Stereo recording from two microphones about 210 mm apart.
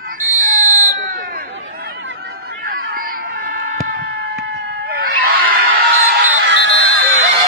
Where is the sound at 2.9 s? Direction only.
45° right (ahead or behind); by 6.9 s 60° right (ahead or behind).